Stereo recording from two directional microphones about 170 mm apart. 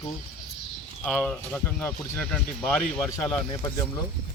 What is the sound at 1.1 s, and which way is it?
Speech, 5° left (ahead or behind).